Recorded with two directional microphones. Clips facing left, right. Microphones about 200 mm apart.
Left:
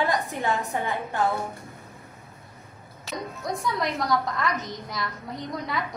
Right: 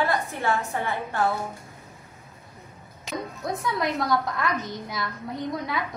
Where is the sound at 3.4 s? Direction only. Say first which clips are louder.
Even; centre (ahead or behind).